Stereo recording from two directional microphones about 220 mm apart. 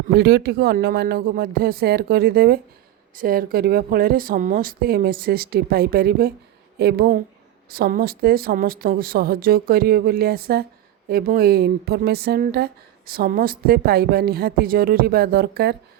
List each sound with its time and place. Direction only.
0.1 s speech: 45° right (ahead or behind)